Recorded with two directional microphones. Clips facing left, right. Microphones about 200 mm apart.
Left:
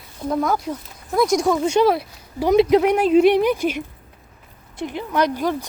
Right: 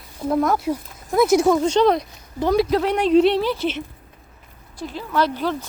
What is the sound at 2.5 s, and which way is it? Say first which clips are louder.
Speech: left 4 dB; 20° left (ahead or behind).